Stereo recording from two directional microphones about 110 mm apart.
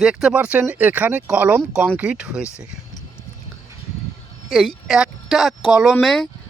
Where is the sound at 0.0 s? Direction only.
5° right (ahead or behind).